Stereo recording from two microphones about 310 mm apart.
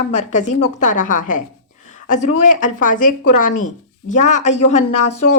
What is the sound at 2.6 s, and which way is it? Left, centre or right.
Speech, left.